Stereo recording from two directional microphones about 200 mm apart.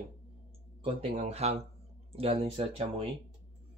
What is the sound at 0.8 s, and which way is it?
Speech, 30° right (ahead or behind).